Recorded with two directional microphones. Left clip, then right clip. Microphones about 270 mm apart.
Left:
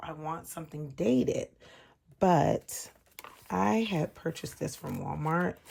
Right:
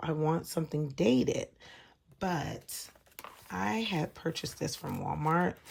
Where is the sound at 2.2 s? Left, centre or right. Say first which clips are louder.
Left 10 dB; centre.